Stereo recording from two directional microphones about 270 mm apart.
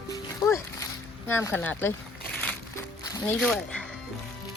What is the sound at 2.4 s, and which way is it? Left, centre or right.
Music, centre.